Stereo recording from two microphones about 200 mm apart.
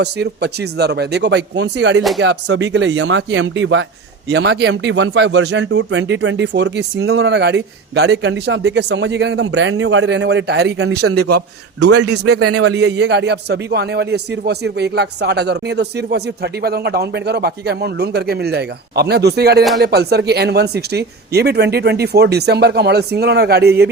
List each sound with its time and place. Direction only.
0.0 s a man's voice: 55° right (ahead or behind)
4.3 s a man's voice: 55° right (ahead or behind)
10.8 s a man's voice: 90° right
11.3 s a man's voice: 55° right (ahead or behind)
12.3 s a man's voice: 90° right
12.7 s a man's voice: 60° right (ahead or behind)